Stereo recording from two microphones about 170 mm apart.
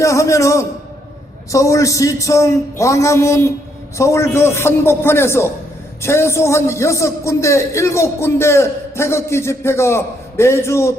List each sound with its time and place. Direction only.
0.0 s a man's voice: 20° left (ahead or behind)